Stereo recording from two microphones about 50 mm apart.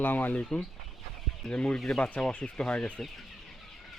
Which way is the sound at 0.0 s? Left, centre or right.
Left.